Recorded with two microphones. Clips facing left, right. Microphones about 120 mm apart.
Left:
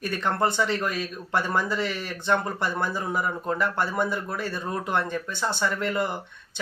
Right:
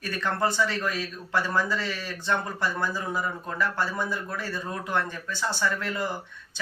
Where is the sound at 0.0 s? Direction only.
20° left (ahead or behind).